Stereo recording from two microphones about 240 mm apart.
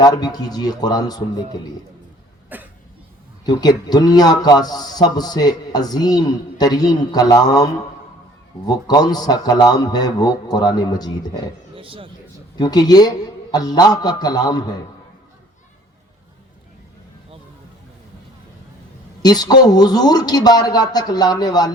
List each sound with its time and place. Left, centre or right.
0.0 s a man's voice: centre
2.5 s cough: centre
3.4 s a man's voice: centre
11.7 s a sound: right
12.5 s a man's voice: centre
19.2 s a man's voice: centre